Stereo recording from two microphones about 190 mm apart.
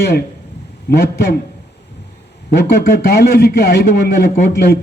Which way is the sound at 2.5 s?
55° left (ahead or behind).